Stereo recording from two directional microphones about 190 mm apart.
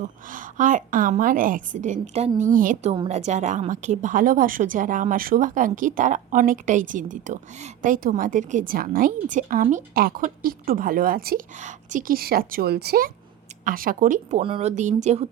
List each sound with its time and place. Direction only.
0.3 s a woman's voice: 45° right (ahead or behind)
2.9 s a woman's voice: 30° right (ahead or behind)